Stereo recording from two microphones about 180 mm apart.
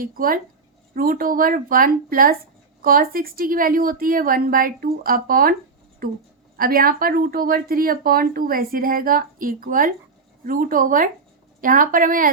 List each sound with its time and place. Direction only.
0.0 s speech: 55° right (ahead or behind)